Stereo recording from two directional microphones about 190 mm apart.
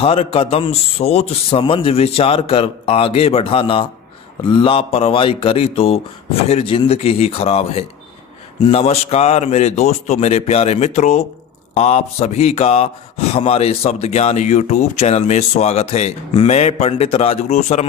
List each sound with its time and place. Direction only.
0.0 s speech: 30° left (ahead or behind)